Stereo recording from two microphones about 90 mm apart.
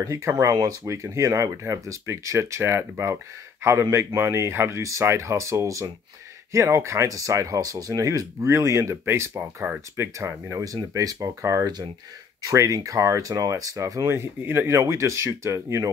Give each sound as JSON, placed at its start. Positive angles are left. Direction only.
{"t": 0.0, "sound": "speech", "side_deg": -35}
{"t": 9.3, "sound": "speech", "side_deg": -20}
{"t": 14.0, "sound": "speech", "side_deg": -30}